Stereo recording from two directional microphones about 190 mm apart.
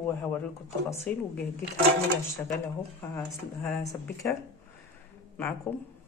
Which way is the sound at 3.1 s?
10° left (ahead or behind).